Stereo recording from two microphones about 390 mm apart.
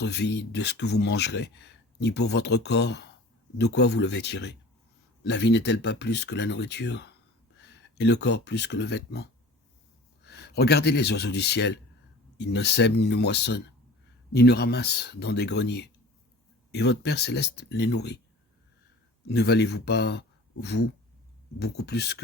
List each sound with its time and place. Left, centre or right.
0.0 s speech: left
10.2 s speech: left
19.3 s speech: left